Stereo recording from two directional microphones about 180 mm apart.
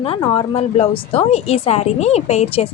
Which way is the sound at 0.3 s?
35° left (ahead or behind).